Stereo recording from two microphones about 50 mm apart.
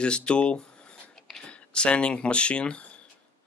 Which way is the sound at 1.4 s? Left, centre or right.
Left.